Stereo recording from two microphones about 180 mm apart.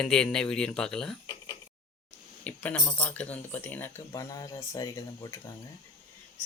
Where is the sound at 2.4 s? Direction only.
10° left (ahead or behind).